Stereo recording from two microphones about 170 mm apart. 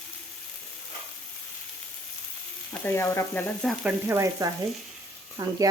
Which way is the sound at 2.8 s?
15° left (ahead or behind).